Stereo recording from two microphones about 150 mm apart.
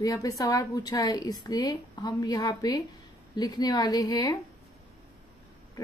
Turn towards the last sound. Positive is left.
turn(degrees=25)  # may be behind; listen again after turning